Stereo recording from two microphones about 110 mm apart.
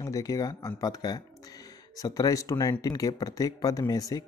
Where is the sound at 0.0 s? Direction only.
30° left (ahead or behind).